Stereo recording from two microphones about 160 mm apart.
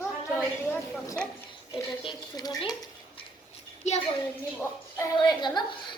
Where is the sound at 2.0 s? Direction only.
25° left (ahead or behind).